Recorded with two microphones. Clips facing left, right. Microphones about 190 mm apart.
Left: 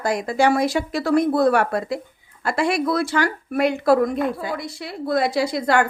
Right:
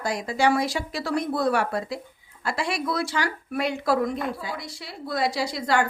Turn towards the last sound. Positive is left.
turn(degrees=55)  # may be behind; listen again after turning